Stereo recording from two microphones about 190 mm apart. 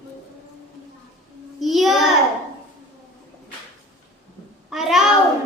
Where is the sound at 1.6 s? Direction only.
Centre (ahead or behind).